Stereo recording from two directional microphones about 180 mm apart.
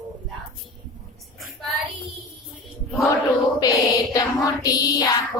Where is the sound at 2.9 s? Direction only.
20° left (ahead or behind).